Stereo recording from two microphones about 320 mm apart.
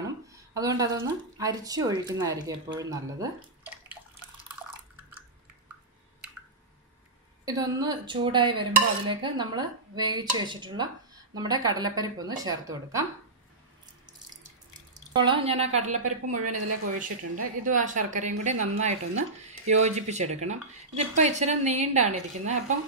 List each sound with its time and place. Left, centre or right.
0.0 s speech: centre
7.4 s speech: centre
15.1 s a woman's voice: centre